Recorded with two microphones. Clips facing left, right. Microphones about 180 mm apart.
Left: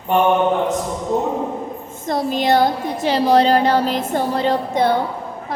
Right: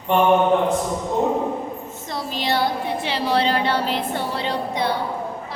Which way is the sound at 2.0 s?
50° left (ahead or behind).